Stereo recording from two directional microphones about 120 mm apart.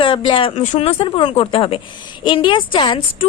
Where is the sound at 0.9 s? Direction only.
45° left (ahead or behind).